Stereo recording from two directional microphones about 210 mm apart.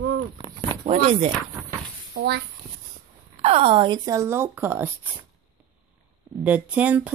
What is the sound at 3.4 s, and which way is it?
Speech, 30° right (ahead or behind).